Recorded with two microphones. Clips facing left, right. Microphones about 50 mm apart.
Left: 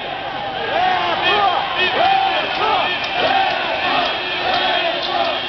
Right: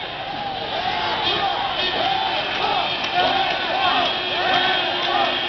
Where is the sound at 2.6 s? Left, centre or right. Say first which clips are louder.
Left 4 dB; left.